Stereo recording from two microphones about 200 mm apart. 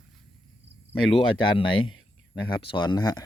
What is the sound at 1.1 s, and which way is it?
Speech, 25° left (ahead or behind).